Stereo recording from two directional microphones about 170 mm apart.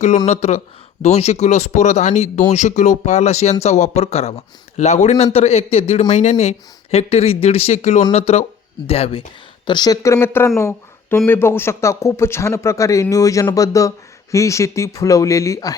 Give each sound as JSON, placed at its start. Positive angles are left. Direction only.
{"t": 0.3, "sound": "speech", "side_deg": 40}
{"t": 9.6, "sound": "a man's voice", "side_deg": 25}
{"t": 10.6, "sound": "a sound", "side_deg": 15}
{"t": 11.2, "sound": "a man's voice", "side_deg": 15}